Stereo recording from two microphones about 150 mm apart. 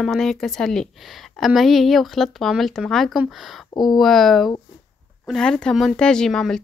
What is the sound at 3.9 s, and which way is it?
Speech, centre (ahead or behind).